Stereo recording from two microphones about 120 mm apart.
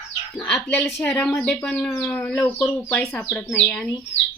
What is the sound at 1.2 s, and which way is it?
Speech, 15° left (ahead or behind).